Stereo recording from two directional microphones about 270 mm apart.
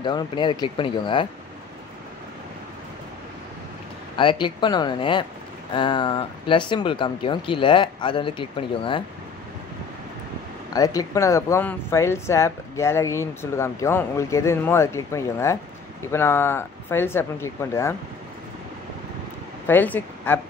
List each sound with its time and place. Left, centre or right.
0.0 s speech: centre
4.2 s speech: centre
10.7 s speech: centre
19.7 s speech: centre